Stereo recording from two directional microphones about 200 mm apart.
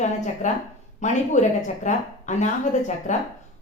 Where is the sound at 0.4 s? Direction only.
40° left (ahead or behind).